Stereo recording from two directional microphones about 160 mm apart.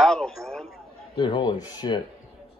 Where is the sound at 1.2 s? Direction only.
30° left (ahead or behind).